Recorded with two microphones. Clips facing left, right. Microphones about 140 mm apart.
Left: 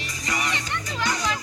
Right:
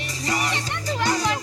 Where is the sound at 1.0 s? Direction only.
30° right (ahead or behind).